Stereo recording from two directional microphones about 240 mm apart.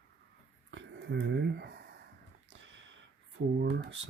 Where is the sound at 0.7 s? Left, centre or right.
Right.